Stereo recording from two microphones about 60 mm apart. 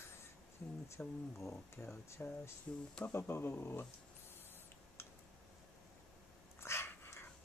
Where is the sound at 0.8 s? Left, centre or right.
Left.